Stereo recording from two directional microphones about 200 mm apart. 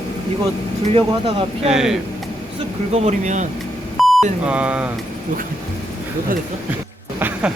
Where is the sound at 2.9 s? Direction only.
35° right (ahead or behind).